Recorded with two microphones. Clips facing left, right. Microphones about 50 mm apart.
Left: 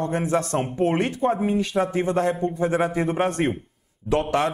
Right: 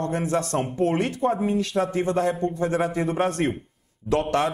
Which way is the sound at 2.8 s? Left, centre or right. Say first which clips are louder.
Left 1 dB; centre.